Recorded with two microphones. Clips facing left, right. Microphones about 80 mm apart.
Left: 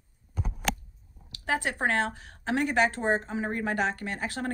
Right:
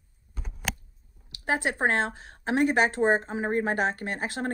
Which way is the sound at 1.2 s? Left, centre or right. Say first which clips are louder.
Right 2 dB; centre.